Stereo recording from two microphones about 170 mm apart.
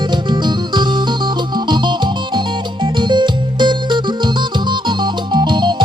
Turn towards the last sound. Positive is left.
turn(degrees=-25)  # may be behind; listen again after turning